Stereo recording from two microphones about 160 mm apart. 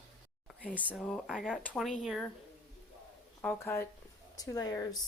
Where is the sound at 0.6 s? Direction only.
10° right (ahead or behind).